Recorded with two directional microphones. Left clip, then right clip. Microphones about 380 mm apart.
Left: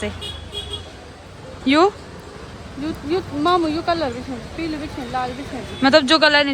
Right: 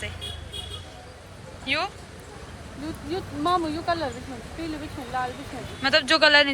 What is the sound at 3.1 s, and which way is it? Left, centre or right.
Speech, left.